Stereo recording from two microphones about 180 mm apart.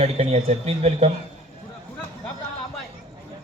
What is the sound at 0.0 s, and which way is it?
A man's voice, 35° right (ahead or behind).